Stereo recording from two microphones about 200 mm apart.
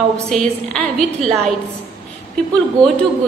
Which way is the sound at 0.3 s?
Centre (ahead or behind).